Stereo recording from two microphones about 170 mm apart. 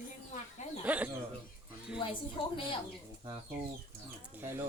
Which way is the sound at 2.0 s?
30° left (ahead or behind).